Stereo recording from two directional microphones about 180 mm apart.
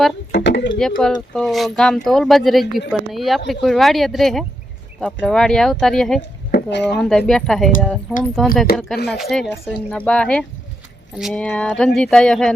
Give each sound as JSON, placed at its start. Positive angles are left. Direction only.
{"t": 0.3, "sound": "speech", "side_deg": 75}
{"t": 0.8, "sound": "speech", "side_deg": 5}
{"t": 6.5, "sound": "a sound", "side_deg": 75}
{"t": 7.0, "sound": "speech", "side_deg": 5}